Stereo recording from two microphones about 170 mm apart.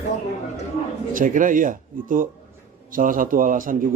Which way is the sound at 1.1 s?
50° right (ahead or behind).